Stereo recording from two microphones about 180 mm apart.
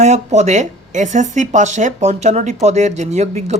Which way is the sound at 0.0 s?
40° right (ahead or behind).